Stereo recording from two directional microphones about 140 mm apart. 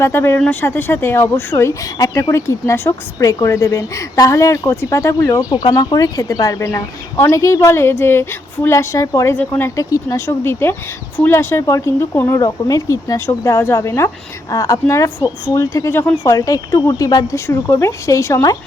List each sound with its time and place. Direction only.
0.0 s speech: 20° left (ahead or behind)